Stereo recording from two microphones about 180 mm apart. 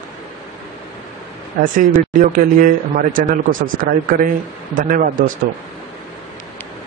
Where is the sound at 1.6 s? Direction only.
50° right (ahead or behind).